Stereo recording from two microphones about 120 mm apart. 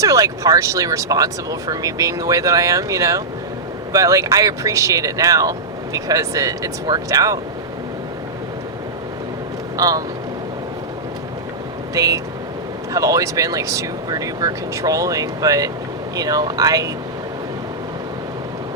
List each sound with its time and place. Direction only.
0.0 s speech: 30° right (ahead or behind)
9.7 s speech: 30° right (ahead or behind)
11.9 s speech: 30° right (ahead or behind)